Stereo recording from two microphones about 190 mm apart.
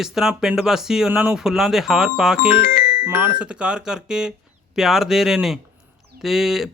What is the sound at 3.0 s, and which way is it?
Speech, 10° right (ahead or behind).